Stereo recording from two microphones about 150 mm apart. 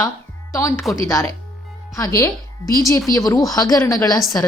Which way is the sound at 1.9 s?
20° left (ahead or behind).